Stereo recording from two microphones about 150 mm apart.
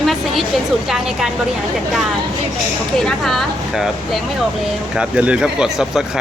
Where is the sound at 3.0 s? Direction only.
Centre (ahead or behind).